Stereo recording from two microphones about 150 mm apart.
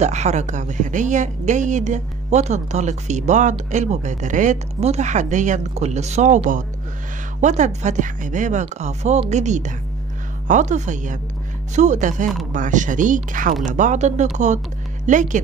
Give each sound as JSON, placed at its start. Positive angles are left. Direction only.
{"t": 0.0, "sound": "speech", "side_deg": -50}